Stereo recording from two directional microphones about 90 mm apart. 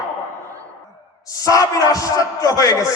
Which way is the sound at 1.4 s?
40° left (ahead or behind).